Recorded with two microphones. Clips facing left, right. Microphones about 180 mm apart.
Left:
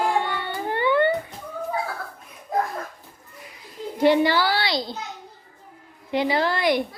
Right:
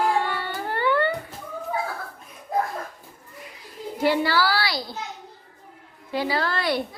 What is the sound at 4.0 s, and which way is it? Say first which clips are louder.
Speech: left 3 dB; 20° left (ahead or behind).